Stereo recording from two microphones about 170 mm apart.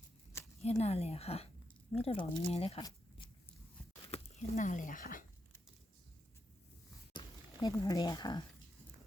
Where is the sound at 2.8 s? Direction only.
30° left (ahead or behind).